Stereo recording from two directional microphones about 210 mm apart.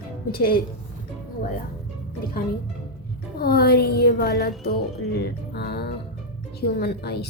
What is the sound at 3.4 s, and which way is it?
A woman's voice, 45° left (ahead or behind).